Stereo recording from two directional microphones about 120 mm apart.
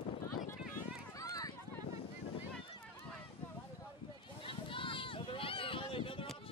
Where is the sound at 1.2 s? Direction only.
30° left (ahead or behind).